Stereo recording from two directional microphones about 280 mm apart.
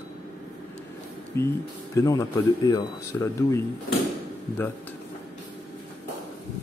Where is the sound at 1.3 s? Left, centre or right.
Centre.